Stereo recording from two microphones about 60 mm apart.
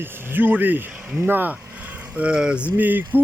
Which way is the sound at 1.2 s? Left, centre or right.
Right.